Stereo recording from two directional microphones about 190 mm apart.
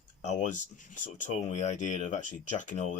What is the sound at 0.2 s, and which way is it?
Speech, 40° left (ahead or behind).